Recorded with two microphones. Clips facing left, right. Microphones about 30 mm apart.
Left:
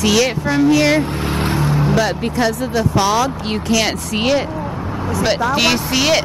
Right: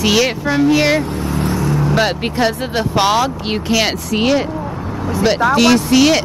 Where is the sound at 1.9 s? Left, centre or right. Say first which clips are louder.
Right 1 dB; right; by 3.9 s centre.